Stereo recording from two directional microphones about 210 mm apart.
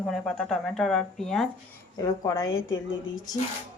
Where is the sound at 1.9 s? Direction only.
20° left (ahead or behind).